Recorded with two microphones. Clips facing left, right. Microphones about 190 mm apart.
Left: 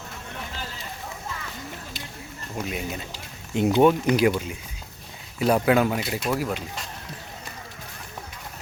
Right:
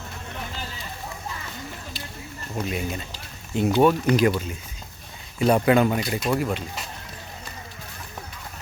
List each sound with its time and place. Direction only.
2.6 s speech: 5° left (ahead or behind)
3.1 s speech: 15° left (ahead or behind)